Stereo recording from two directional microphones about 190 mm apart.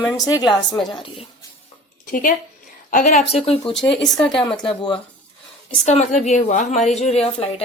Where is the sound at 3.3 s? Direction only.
30° left (ahead or behind).